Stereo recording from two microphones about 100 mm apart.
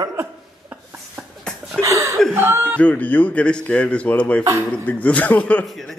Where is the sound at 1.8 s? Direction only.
30° right (ahead or behind).